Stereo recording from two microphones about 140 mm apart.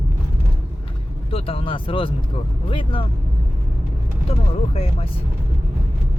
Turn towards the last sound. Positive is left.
turn(degrees=40)  # may be behind; listen again after turning